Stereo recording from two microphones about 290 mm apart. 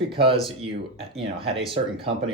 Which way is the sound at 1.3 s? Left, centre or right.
Centre.